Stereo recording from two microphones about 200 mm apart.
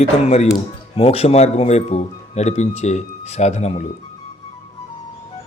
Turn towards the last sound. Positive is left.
turn(degrees=35)  # may be behind; listen again after turning